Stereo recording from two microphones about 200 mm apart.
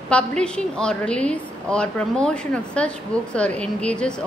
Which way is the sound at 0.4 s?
5° left (ahead or behind).